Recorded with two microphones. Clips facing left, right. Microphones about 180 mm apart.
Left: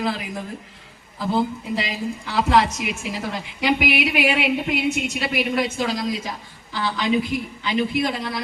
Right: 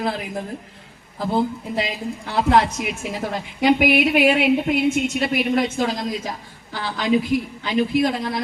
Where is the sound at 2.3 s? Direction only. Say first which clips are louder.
Right 1 dB; 50° right (ahead or behind).